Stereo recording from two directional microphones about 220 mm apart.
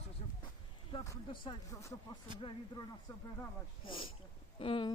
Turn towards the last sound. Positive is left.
turn(degrees=25)  # may be behind; listen again after turning